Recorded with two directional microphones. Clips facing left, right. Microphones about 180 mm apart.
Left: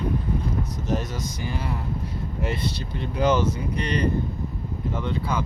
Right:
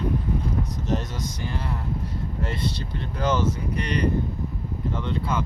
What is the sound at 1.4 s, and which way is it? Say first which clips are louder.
Speech: left 1 dB; 5° left (ahead or behind).